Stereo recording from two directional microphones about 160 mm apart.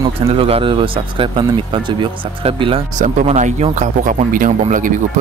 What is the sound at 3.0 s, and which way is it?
Speech, 50° right (ahead or behind).